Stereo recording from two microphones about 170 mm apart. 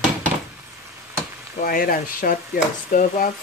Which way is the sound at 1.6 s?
55° left (ahead or behind).